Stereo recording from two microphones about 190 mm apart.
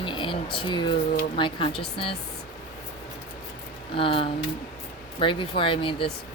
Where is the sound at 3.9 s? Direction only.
25° left (ahead or behind).